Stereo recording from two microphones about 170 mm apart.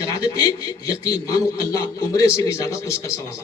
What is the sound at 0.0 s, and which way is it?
A man's voice, 20° left (ahead or behind).